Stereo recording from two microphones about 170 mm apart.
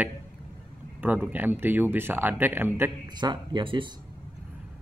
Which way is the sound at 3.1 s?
25° right (ahead or behind).